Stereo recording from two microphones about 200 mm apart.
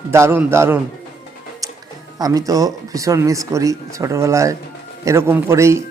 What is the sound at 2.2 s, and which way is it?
Speech, 20° right (ahead or behind).